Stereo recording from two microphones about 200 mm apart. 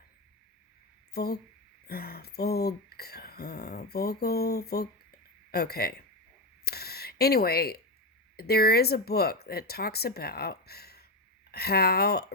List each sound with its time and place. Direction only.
1.1 s speech: 50° left (ahead or behind)
6.7 s a sound: 50° left (ahead or behind)
8.4 s speech: 50° left (ahead or behind)